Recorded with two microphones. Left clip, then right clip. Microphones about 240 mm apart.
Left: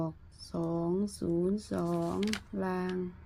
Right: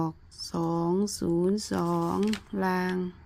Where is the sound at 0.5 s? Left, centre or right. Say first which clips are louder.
Right 5 dB; right.